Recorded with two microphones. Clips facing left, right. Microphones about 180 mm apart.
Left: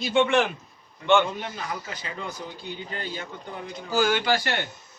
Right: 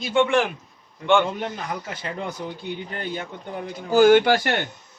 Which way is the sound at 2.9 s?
55° right (ahead or behind).